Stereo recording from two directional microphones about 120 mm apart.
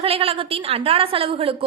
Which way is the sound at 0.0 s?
55° right (ahead or behind).